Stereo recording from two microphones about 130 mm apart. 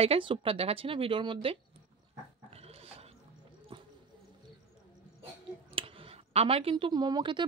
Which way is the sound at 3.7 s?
40° right (ahead or behind).